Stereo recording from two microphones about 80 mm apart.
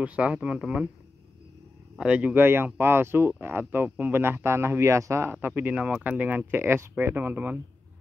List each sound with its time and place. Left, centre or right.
0.0 s speech: centre
2.0 s speech: centre
2.3 s speech: right